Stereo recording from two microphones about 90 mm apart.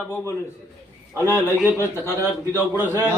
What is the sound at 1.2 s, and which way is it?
Speech, 30° left (ahead or behind).